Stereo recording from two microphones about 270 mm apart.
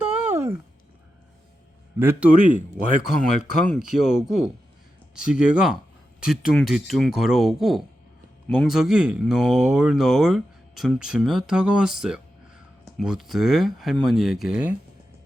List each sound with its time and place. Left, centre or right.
0.0 s a sound: centre
2.0 s speech: centre
2.5 s speech: right
3.7 s speech: centre